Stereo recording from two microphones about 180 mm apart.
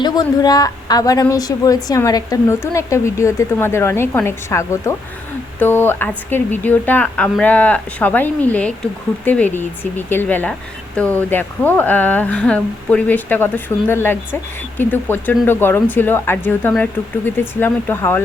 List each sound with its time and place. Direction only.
0.0 s speech: 20° left (ahead or behind)